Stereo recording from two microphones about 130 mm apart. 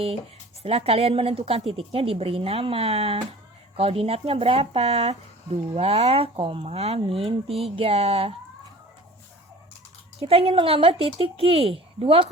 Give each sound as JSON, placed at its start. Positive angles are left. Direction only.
{"t": 0.6, "sound": "speech", "side_deg": -50}
{"t": 10.2, "sound": "speech", "side_deg": -50}